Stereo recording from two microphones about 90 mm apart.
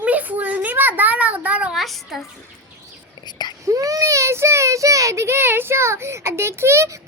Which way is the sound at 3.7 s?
40° right (ahead or behind).